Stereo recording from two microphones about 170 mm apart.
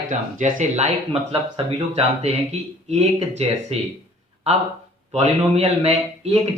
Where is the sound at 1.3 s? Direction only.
35° right (ahead or behind).